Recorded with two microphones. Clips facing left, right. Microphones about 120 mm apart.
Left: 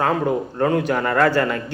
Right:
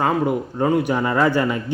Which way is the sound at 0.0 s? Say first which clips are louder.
Even; 10° right (ahead or behind).